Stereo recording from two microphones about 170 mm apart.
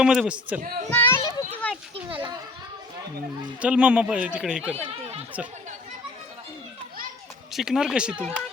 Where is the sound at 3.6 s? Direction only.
10° right (ahead or behind).